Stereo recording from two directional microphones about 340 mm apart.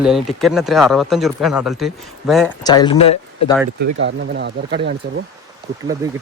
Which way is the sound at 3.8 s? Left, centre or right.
Right.